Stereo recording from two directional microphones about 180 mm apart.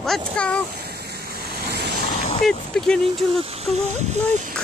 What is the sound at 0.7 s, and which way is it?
Waves, 65° right (ahead or behind).